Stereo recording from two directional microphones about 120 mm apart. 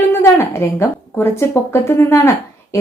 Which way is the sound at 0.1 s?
20° left (ahead or behind).